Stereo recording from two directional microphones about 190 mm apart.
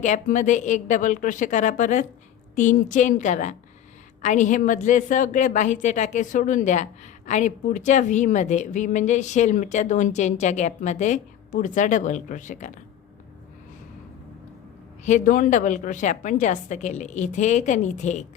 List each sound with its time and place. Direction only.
0.0 s a woman's voice: 40° left (ahead or behind)
15.0 s a woman's voice: 40° left (ahead or behind)